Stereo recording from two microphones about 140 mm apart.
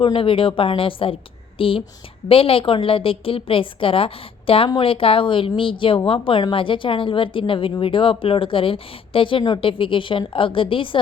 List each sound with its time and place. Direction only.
0.0 s a woman's voice: 40° left (ahead or behind)